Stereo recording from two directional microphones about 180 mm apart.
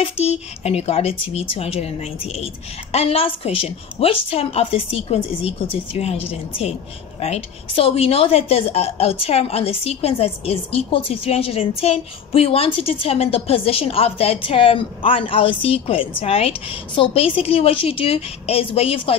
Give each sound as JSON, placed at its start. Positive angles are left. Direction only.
{"t": 0.0, "sound": "a woman's voice", "side_deg": 35}